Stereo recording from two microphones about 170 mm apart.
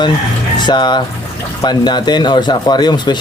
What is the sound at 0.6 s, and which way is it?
Speech, 25° left (ahead or behind).